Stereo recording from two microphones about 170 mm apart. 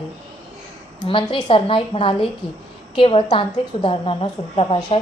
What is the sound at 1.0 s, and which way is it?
A woman's voice, 30° left (ahead or behind).